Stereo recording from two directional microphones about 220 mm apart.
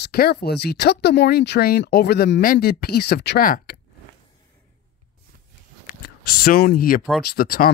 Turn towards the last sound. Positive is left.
turn(degrees=40)  # may be behind; listen again after turning